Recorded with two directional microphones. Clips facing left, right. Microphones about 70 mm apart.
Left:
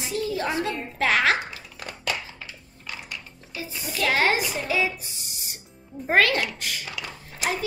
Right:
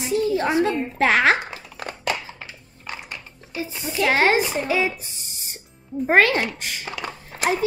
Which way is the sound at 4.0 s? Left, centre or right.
Right.